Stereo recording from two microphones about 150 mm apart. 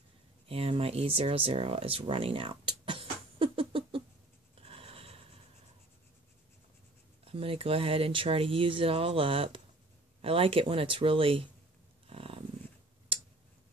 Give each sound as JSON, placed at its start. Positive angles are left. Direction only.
{"t": 0.5, "sound": "speech", "side_deg": -40}
{"t": 4.6, "sound": "a sound", "side_deg": -40}
{"t": 7.2, "sound": "speech", "side_deg": -40}
{"t": 12.1, "sound": "dog", "side_deg": -40}